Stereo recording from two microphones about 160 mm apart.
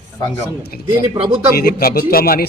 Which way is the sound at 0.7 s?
70° left (ahead or behind).